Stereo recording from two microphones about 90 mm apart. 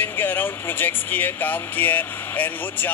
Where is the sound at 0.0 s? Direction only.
20° left (ahead or behind).